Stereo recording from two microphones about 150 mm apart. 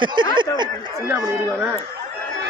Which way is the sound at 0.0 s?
30° right (ahead or behind).